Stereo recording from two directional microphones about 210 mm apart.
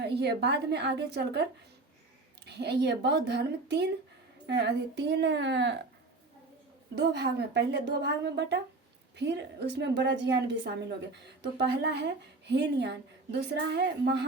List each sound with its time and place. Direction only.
0.0 s a woman's voice: 50° right (ahead or behind)
2.5 s a woman's voice: 55° right (ahead or behind)
6.9 s a woman's voice: 55° right (ahead or behind)